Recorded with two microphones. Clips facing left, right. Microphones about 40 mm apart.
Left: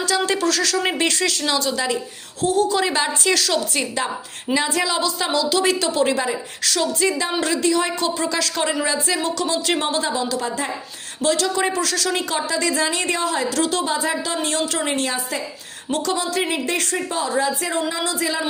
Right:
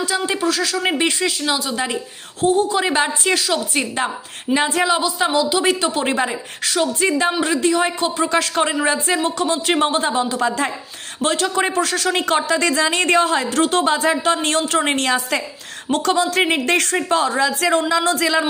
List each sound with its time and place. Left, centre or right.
0.0 s speech: centre
1.7 s speech: right
12.2 s a woman's voice: right
14.8 s a woman's voice: right
15.9 s a woman's voice: right